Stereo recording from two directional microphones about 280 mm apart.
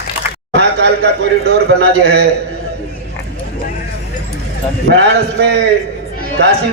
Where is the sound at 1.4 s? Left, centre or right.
Right.